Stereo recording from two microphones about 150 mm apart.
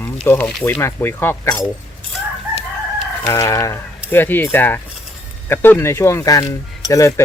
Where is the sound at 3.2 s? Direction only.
20° left (ahead or behind).